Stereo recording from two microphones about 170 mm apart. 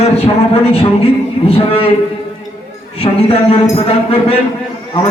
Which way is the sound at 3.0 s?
35° left (ahead or behind).